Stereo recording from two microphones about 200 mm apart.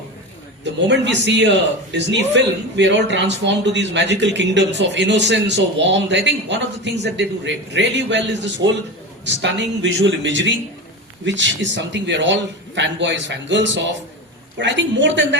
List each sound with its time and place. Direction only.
0.6 s a man's voice: 60° right (ahead or behind)